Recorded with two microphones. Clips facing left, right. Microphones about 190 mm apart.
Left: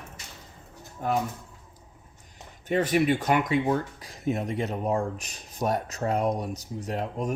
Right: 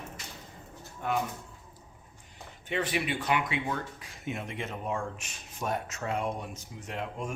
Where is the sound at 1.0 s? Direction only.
40° left (ahead or behind).